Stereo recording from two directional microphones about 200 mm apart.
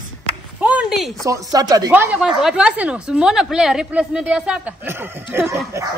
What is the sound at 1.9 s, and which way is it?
Speech, 5° right (ahead or behind).